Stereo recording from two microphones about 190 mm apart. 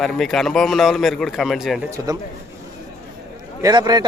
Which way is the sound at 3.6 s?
20° right (ahead or behind).